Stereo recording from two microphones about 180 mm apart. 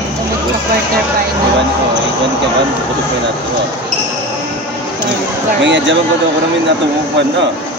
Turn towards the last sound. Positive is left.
turn(degrees=-90)